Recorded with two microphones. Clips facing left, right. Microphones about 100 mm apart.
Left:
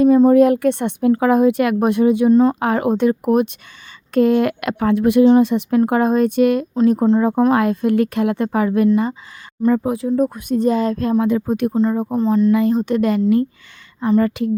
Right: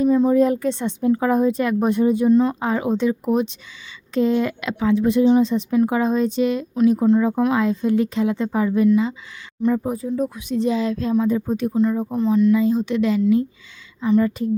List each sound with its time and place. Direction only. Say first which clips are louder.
0.3 s speech: left 5 dB; 70° left (ahead or behind)
2.3 s a woman's voice: left 4 dB; 45° left (ahead or behind)
2.6 s speech: left 4 dB; 60° left (ahead or behind)
6.8 s a woman's voice: left 1 dB; 45° left (ahead or behind); by 8.9 s 70° left (ahead or behind)
9.7 s speech: left 4 dB; 85° left
10.1 s a woman's voice: left 7 dB; 50° left (ahead or behind)
11.3 s speech: left 3 dB; 75° left (ahead or behind)
11.7 s speech: left 2 dB; 35° left (ahead or behind)
12.5 s a woman's voice: left 2 dB; 60° left (ahead or behind)
14.2 s speech: left 3 dB; 70° left (ahead or behind)